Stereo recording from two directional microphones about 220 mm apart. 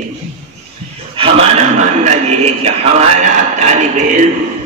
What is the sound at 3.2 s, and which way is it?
Speech, 35° right (ahead or behind).